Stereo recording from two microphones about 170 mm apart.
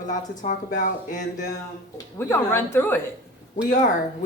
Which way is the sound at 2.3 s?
15° left (ahead or behind).